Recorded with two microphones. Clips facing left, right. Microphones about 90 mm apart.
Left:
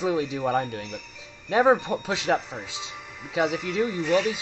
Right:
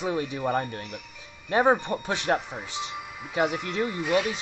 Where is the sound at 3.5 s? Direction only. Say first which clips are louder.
Left 2 dB; 50° right (ahead or behind).